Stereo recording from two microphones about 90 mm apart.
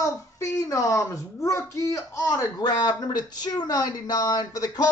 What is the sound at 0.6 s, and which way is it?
Speech, 35° left (ahead or behind).